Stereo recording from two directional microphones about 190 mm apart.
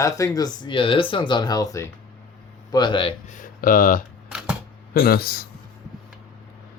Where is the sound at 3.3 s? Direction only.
45° left (ahead or behind).